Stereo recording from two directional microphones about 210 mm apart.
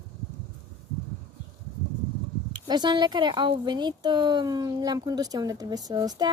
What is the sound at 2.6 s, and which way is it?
Speech, 20° right (ahead or behind).